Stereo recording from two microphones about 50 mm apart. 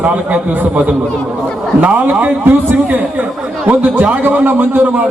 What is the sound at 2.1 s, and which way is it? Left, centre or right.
A man's voice, right.